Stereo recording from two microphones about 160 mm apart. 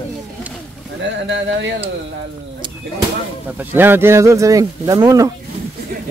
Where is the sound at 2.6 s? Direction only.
30° right (ahead or behind).